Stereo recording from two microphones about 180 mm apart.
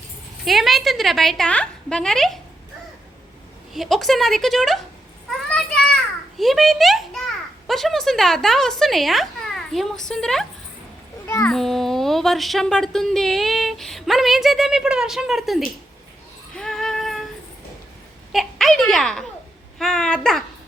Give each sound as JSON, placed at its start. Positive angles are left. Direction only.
{"t": 0.4, "sound": "speech", "side_deg": 0}
{"t": 3.8, "sound": "speech", "side_deg": 0}
{"t": 5.5, "sound": "children playing", "side_deg": 5}
{"t": 6.4, "sound": "speech", "side_deg": 0}
{"t": 11.3, "sound": "a child's voice", "side_deg": 15}
{"t": 11.5, "sound": "speech", "side_deg": 0}
{"t": 16.6, "sound": "a sound", "side_deg": 0}
{"t": 18.3, "sound": "speech", "side_deg": 0}